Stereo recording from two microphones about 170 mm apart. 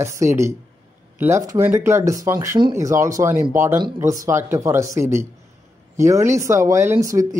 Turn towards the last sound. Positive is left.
turn(degrees=-20)  # may be behind; listen again after turning